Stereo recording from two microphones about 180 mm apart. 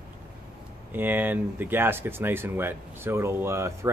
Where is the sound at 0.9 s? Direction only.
10° right (ahead or behind).